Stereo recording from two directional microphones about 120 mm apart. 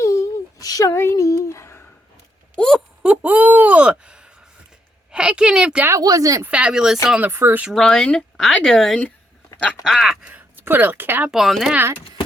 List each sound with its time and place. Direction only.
0.0 s a sound: 25° left (ahead or behind)
2.6 s a sound: 5° left (ahead or behind)
3.0 s a sound: 10° right (ahead or behind)
5.9 s speech: 30° right (ahead or behind)
6.4 s speech: 10° right (ahead or behind)
7.2 s speech: 20° right (ahead or behind)
7.7 s speech: 5° left (ahead or behind)
9.8 s speech: centre (ahead or behind)
11.3 s speech: centre (ahead or behind)